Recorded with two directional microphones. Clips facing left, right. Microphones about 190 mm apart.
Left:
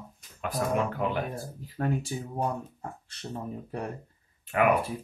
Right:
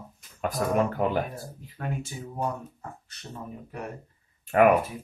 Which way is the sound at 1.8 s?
35° left (ahead or behind).